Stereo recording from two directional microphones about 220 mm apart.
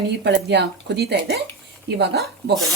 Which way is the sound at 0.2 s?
50° right (ahead or behind).